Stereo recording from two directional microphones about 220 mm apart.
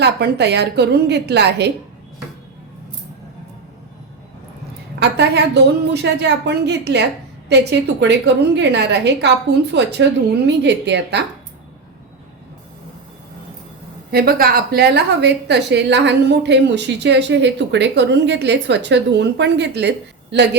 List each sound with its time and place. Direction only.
0.0 s a woman's voice: 50° right (ahead or behind)
4.9 s a woman's voice: 50° right (ahead or behind)
14.1 s a woman's voice: 45° right (ahead or behind)